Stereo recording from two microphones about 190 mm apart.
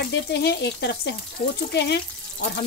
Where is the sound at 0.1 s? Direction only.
60° left (ahead or behind).